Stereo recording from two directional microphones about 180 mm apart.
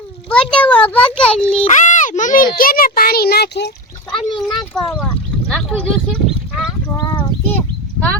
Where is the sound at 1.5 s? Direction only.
40° left (ahead or behind).